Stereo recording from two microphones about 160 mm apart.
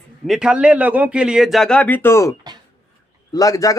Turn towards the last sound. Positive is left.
turn(degrees=20)  # may be behind; listen again after turning